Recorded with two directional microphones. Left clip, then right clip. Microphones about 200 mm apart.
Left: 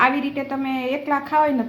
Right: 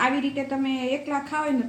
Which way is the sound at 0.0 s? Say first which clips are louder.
Left 5 dB; 25° left (ahead or behind).